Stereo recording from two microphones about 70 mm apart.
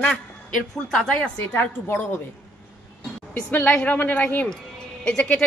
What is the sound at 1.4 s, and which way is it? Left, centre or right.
Speech, left.